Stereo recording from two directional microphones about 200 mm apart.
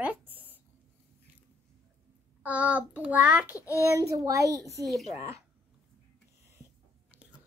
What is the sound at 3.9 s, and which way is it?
Speech, 15° right (ahead or behind).